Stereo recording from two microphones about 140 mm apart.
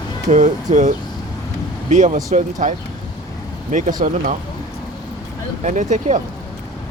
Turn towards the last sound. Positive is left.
turn(degrees=-60)  # may be behind; listen again after turning